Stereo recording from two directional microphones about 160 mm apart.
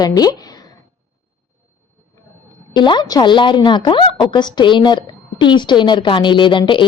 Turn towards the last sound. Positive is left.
turn(degrees=30)  # may be behind; listen again after turning